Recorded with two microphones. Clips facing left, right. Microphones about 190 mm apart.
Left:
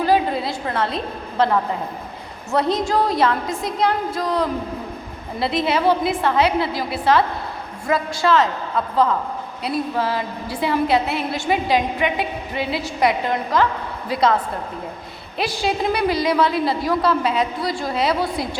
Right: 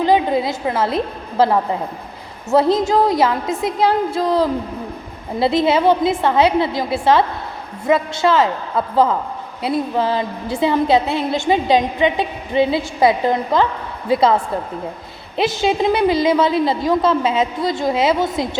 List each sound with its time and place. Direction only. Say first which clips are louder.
0.0 s a sound: right 3 dB; 20° right (ahead or behind)
2.5 s a woman's voice: right 5 dB; 25° right (ahead or behind)
9.6 s a woman's voice: right 4 dB; 25° right (ahead or behind)
15.4 s a woman's voice: right 5 dB; 25° right (ahead or behind)